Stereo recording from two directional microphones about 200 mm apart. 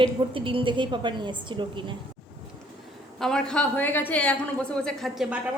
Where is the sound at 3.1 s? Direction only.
5° left (ahead or behind).